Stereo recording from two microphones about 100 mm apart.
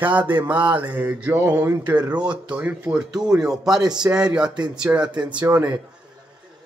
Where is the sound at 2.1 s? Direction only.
10° right (ahead or behind).